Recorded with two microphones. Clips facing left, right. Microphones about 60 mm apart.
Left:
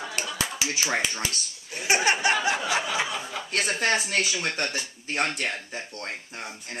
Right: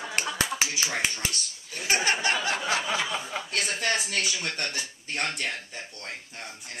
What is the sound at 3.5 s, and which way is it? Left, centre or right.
Speech, left.